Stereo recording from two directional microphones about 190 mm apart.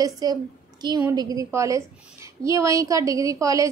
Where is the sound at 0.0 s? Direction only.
20° right (ahead or behind).